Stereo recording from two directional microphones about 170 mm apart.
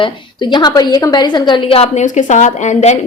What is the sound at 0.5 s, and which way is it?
A woman's voice, 25° left (ahead or behind).